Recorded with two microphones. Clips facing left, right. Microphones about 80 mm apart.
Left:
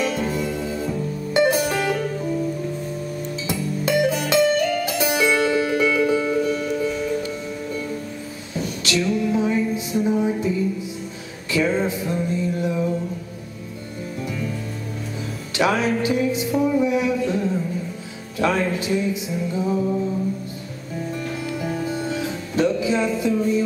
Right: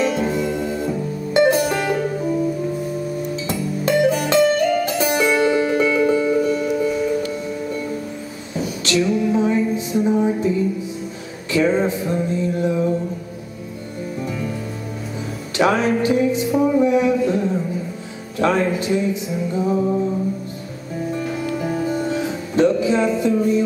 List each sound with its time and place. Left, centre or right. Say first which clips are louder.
0.0 s music: right 4 dB; centre
3.4 s music: right 1 dB; centre
8.5 s a sound: right 4 dB; centre
10.0 s music: right 3 dB; centre
11.5 s music: right 3 dB; centre
15.5 s music: right 3 dB; centre
16.6 s music: right 3 dB; centre
16.9 s a sound: right 4 dB; centre
18.4 s music: right 3 dB; centre
21.1 s music: right 5 dB; centre